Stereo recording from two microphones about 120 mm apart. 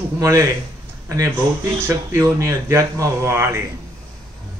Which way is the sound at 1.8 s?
20° right (ahead or behind).